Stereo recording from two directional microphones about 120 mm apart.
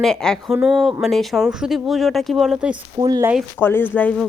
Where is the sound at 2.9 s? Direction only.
35° right (ahead or behind).